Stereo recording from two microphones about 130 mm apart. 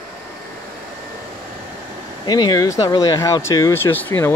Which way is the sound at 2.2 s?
35° left (ahead or behind).